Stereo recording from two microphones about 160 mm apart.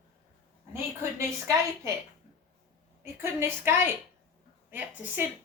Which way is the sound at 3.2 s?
15° right (ahead or behind).